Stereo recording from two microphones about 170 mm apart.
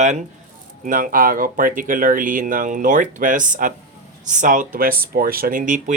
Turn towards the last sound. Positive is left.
turn(degrees=-45)  # may be behind; listen again after turning